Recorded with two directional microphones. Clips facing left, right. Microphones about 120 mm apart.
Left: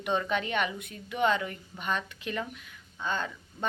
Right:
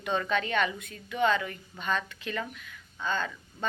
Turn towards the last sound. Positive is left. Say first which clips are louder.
# right 1 dB
turn(degrees=25)  # may be behind; listen again after turning